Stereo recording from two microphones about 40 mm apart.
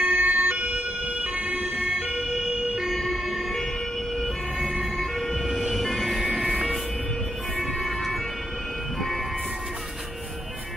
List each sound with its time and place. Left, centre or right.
0.0 s emergency vehicle: right
1.2 s emergency vehicle: right
2.0 s emergency vehicle: right
2.9 s emergency vehicle: centre
4.9 s emergency vehicle: centre
7.5 s ambulance: centre